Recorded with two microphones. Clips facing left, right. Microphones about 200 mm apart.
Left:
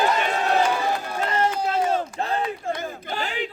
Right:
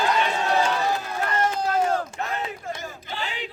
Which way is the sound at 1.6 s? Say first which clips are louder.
Even; 25° left (ahead or behind).